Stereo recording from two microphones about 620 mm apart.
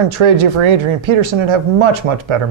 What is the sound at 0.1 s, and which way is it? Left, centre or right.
Speech, right.